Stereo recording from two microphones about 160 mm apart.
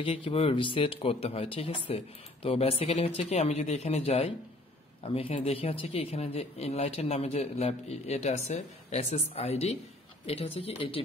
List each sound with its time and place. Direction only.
0.0 s speech: 35° left (ahead or behind)